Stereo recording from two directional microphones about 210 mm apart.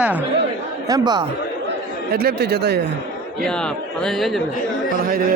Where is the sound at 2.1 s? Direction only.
50° right (ahead or behind).